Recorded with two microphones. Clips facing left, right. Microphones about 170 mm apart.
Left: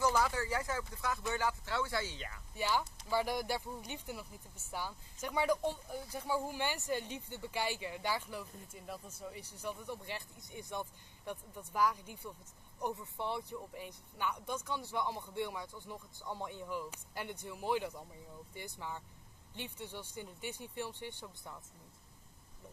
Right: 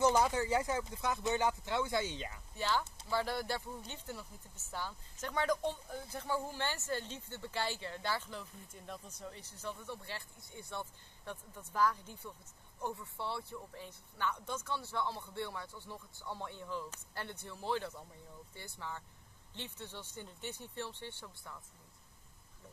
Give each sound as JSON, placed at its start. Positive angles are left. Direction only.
{"t": 0.0, "sound": "speech", "side_deg": -20}
{"t": 2.5, "sound": "speech", "side_deg": 10}